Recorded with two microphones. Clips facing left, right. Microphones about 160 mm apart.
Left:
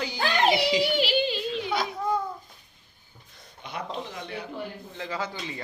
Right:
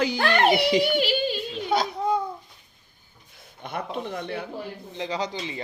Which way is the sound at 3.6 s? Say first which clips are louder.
Right 4 dB; 55° right (ahead or behind).